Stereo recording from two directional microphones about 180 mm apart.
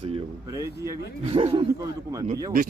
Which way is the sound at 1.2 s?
30° right (ahead or behind).